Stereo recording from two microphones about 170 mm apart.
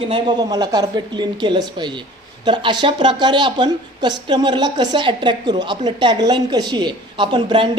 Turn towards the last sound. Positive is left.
turn(degrees=-25)  # may be behind; listen again after turning